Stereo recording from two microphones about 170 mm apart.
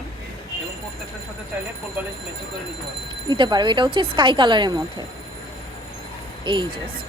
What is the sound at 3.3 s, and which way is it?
A woman's voice, 25° right (ahead or behind).